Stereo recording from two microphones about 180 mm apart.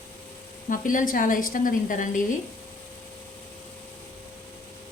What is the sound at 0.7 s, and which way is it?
A woman's voice, 45° left (ahead or behind).